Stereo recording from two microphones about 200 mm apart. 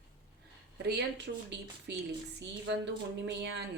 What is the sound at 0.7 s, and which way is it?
Speech, 55° right (ahead or behind).